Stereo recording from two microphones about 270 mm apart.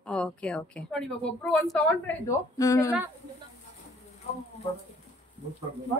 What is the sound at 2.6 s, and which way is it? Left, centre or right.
Speech, centre.